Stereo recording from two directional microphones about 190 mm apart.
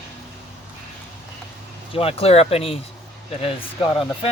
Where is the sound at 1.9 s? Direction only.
30° left (ahead or behind).